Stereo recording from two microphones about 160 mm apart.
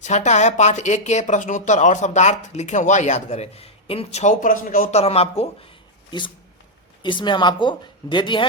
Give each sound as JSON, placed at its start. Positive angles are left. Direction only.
{"t": 0.0, "sound": "speech", "side_deg": 45}
{"t": 4.9, "sound": "speech", "side_deg": 40}